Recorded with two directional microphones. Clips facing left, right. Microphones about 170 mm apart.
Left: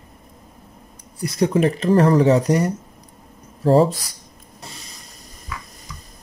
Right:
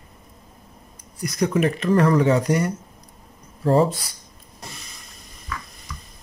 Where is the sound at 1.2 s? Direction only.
30° left (ahead or behind).